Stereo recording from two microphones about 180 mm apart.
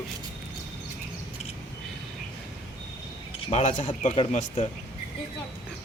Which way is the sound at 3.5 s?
40° left (ahead or behind).